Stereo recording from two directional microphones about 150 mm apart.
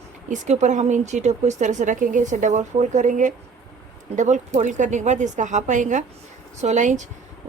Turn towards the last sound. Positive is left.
turn(degrees=-50)  # may be behind; listen again after turning